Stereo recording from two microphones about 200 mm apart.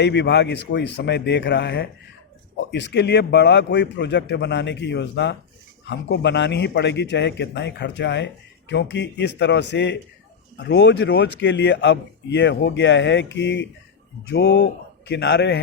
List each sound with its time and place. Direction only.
0.0 s speech: 60° left (ahead or behind)